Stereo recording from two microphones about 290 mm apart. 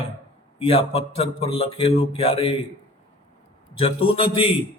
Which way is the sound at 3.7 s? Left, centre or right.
Centre.